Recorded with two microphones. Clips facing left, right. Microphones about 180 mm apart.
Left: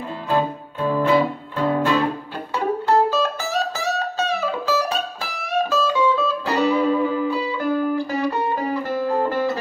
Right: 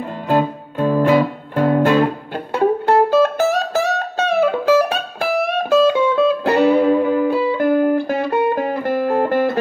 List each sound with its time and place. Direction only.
0.3 s music: 45° right (ahead or behind)